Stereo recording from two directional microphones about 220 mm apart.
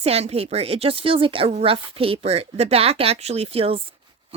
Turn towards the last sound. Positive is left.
turn(degrees=-25)  # may be behind; listen again after turning